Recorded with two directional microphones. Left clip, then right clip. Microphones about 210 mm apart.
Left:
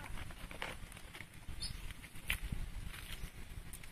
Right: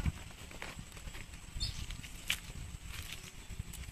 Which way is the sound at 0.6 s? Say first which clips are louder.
Left 2 dB; 30° left (ahead or behind).